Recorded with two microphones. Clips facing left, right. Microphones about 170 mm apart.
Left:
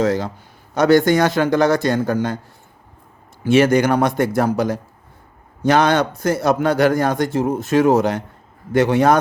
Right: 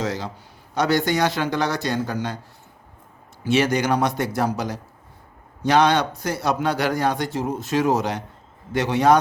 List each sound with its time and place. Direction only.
0.0 s a sound: 50° left (ahead or behind)
0.7 s a man's voice: 50° left (ahead or behind)
3.4 s a man's voice: 50° left (ahead or behind)